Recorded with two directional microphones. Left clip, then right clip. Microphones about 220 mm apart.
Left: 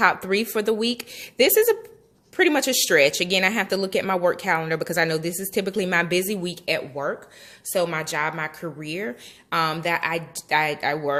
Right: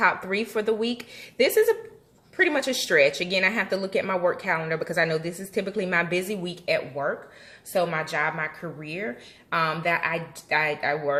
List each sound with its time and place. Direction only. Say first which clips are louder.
0.0 s speech: left 3 dB; 50° left (ahead or behind)